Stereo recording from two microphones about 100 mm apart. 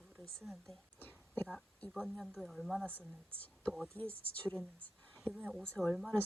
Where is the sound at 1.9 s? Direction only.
Centre (ahead or behind).